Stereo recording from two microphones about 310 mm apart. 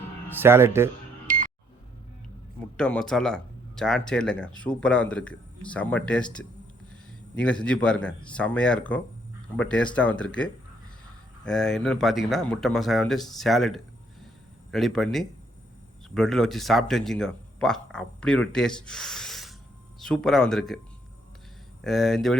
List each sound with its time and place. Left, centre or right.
0.3 s speech: centre
1.3 s music: right
2.7 s speech: centre
21.8 s speech: centre